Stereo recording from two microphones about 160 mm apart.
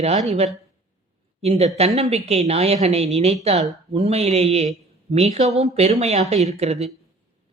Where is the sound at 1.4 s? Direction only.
40° right (ahead or behind).